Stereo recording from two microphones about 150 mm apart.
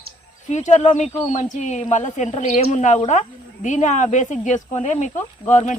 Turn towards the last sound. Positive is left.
turn(degrees=55)  # may be behind; listen again after turning